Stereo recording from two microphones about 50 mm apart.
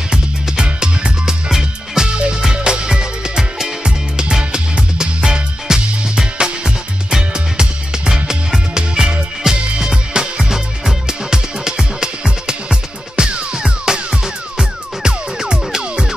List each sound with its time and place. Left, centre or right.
0.1 s music: centre